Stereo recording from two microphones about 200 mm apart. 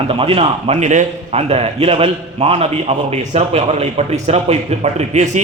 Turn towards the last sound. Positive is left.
turn(degrees=-35)  # may be behind; listen again after turning